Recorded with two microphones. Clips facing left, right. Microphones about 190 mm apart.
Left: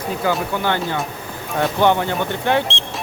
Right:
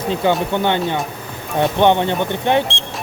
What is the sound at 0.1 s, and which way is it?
Speech, 25° right (ahead or behind).